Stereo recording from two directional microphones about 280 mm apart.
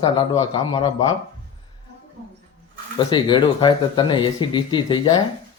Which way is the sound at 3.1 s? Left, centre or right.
Centre.